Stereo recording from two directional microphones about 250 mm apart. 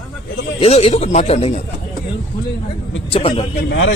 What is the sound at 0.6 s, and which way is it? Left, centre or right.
A man's voice, left.